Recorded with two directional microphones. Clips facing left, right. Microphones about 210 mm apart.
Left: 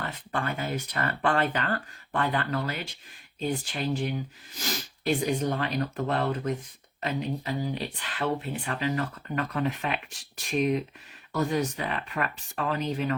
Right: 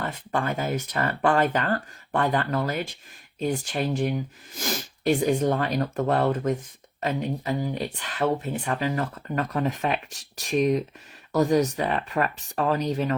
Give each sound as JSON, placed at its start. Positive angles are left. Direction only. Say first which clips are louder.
{"t": 0.3, "sound": "speech", "louder": "right 4 dB", "side_deg": -40}